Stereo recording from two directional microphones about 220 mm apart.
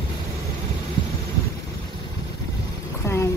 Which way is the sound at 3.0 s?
10° left (ahead or behind).